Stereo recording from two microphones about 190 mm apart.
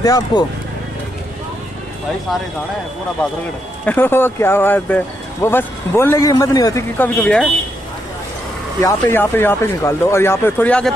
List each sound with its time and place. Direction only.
0.0 s speech: 20° left (ahead or behind)
3.8 s speech: 10° left (ahead or behind)
8.8 s speech: 10° left (ahead or behind)